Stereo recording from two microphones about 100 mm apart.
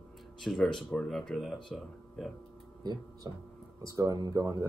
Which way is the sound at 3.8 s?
35° right (ahead or behind).